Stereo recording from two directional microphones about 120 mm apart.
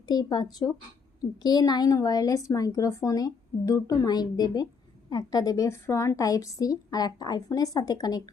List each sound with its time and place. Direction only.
0.1 s speech: 35° left (ahead or behind)